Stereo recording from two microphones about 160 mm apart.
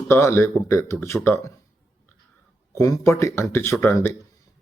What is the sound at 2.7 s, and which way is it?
Speech, 20° left (ahead or behind).